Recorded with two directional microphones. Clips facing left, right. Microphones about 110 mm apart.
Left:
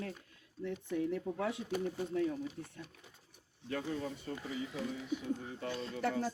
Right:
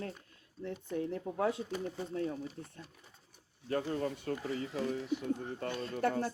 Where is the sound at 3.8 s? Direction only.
60° right (ahead or behind).